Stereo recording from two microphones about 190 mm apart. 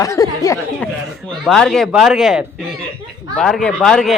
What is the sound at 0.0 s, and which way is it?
Speech, 15° left (ahead or behind).